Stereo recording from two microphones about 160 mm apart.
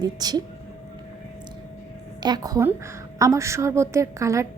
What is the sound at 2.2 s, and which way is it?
A woman's voice, 25° right (ahead or behind).